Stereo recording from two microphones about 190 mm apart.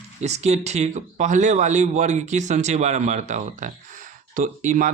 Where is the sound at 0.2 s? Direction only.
35° right (ahead or behind).